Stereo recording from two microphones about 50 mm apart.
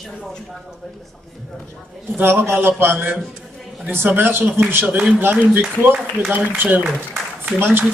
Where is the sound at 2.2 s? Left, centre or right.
Right.